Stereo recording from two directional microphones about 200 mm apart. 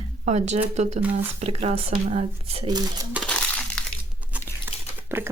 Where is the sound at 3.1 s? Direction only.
5° left (ahead or behind).